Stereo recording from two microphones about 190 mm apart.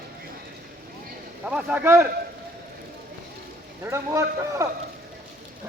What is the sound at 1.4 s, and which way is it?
Speech, 5° right (ahead or behind).